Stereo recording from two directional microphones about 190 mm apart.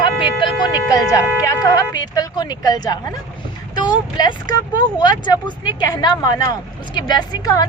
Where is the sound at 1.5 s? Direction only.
20° left (ahead or behind).